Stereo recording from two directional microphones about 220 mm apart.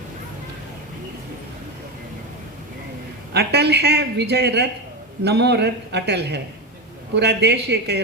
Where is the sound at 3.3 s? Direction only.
50° right (ahead or behind).